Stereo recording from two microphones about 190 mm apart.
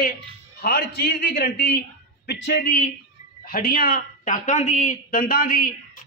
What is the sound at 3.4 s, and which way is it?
A man's voice, 50° left (ahead or behind).